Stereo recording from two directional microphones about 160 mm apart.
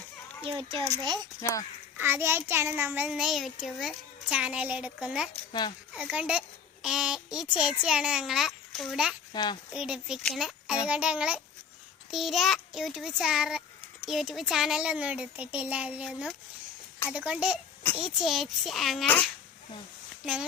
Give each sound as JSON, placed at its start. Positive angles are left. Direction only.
{"t": 0.4, "sound": "a child's voice", "side_deg": -35}
{"t": 1.4, "sound": "speech", "side_deg": 20}
{"t": 2.0, "sound": "a child's voice", "side_deg": -15}
{"t": 5.5, "sound": "speech", "side_deg": 25}
{"t": 5.9, "sound": "a child's voice", "side_deg": -5}
{"t": 9.3, "sound": "speech", "side_deg": 25}
{"t": 9.7, "sound": "a child's voice", "side_deg": -5}